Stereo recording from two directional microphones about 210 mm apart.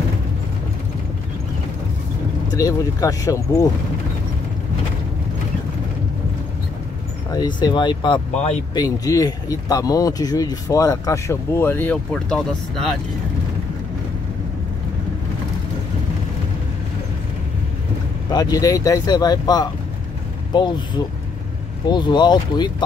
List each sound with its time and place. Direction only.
2.4 s speech: 15° left (ahead or behind)
7.2 s speech: 20° left (ahead or behind)
8.7 s speech: 15° left (ahead or behind); by 12.9 s centre (ahead or behind)
18.3 s speech: 20° left (ahead or behind)